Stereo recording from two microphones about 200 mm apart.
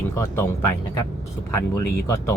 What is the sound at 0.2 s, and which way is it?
Speech, 10° left (ahead or behind).